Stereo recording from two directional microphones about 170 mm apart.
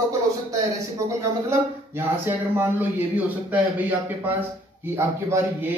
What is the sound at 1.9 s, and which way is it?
A man's voice, 10° right (ahead or behind).